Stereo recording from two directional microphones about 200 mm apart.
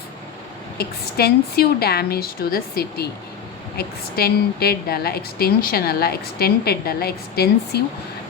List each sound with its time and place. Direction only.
0.8 s a woman's voice: 50° left (ahead or behind)